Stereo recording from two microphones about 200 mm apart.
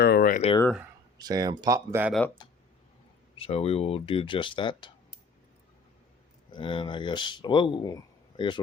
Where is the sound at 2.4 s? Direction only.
20° left (ahead or behind).